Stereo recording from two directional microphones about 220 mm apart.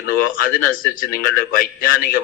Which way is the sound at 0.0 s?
40° left (ahead or behind).